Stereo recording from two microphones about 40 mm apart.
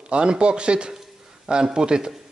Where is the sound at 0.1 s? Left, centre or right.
Right.